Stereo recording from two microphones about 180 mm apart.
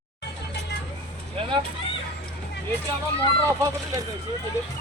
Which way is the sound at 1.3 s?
30° right (ahead or behind).